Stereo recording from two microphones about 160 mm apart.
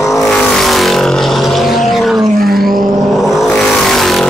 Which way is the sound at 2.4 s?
70° right (ahead or behind).